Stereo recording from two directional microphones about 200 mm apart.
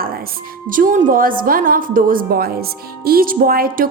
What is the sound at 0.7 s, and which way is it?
A woman's voice, 40° right (ahead or behind).